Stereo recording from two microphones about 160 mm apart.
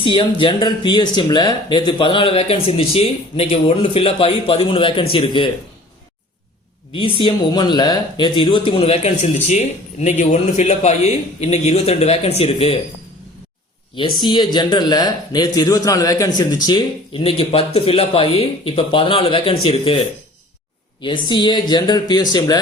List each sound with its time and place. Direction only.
0.0 s speech: 30° left (ahead or behind)
6.9 s speech: 35° left (ahead or behind)
13.9 s a man's voice: 30° left (ahead or behind)
21.0 s a man's voice: 30° left (ahead or behind)